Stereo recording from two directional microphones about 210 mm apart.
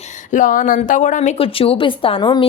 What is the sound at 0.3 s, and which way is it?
A woman's voice, 40° left (ahead or behind).